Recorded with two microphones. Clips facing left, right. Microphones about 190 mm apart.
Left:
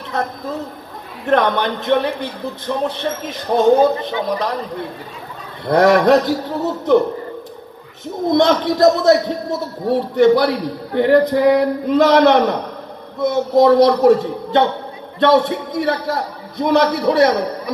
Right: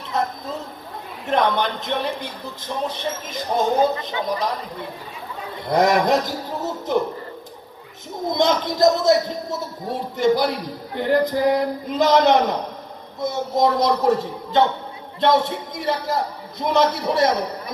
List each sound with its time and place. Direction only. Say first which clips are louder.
1.2 s speech: left 4 dB; 60° left (ahead or behind)
5.7 s speech: left 6 dB; 60° left (ahead or behind)
8.3 s speech: left 6 dB; 60° left (ahead or behind)